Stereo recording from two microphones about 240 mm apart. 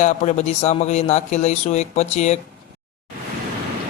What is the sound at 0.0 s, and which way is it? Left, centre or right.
Speech, left.